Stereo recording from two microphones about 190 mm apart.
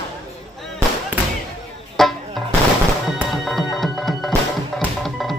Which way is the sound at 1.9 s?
Centre (ahead or behind).